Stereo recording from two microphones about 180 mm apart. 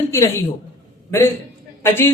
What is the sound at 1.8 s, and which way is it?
Speech, 15° left (ahead or behind).